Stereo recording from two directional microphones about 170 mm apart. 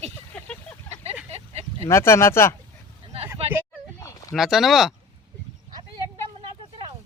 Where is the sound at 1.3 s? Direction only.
40° right (ahead or behind).